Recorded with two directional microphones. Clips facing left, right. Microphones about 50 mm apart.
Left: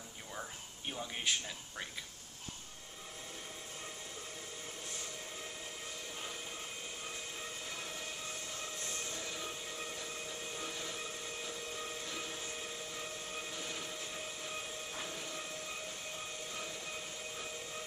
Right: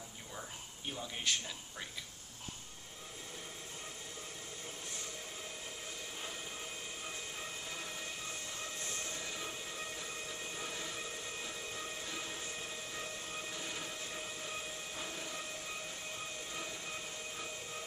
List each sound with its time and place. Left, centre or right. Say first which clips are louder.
1.3 s speech: even; centre